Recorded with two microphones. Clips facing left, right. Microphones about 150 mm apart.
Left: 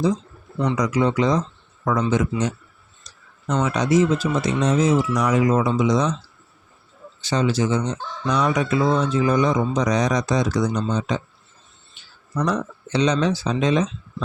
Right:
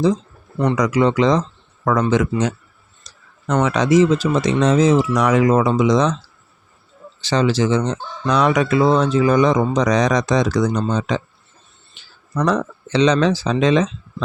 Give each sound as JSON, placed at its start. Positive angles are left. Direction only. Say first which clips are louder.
{"t": 0.6, "sound": "speech", "louder": "right 4 dB", "side_deg": -75}
{"t": 7.2, "sound": "speech", "louder": "right 4 dB", "side_deg": -90}